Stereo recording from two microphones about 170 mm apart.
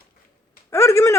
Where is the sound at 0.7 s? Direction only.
15° left (ahead or behind).